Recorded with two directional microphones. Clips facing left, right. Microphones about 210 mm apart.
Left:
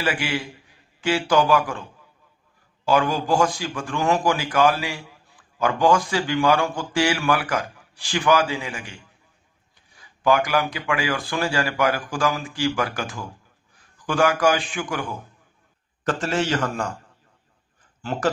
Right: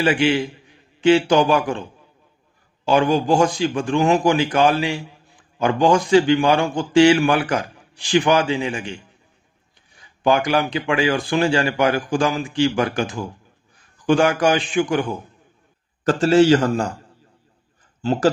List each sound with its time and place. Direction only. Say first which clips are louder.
0.0 s a man's voice: right 8 dB; 25° right (ahead or behind)
10.2 s a man's voice: right 2 dB; 25° right (ahead or behind)
18.0 s a man's voice: right 6 dB; 30° right (ahead or behind)